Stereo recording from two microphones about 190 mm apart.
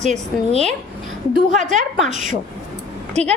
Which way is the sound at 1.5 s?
40° right (ahead or behind).